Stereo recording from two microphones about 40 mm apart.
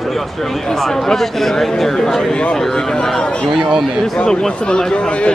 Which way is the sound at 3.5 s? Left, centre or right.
Centre.